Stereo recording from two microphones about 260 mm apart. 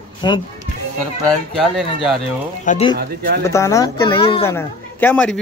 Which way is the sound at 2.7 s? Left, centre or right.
Left.